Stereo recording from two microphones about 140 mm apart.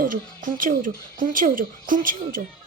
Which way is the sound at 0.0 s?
85° right.